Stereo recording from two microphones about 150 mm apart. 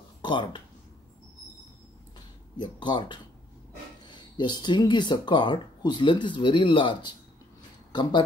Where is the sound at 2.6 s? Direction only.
30° left (ahead or behind).